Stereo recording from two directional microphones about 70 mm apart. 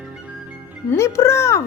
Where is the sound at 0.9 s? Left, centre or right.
Left.